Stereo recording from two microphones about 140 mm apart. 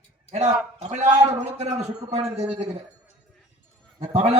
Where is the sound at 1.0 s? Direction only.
50° right (ahead or behind).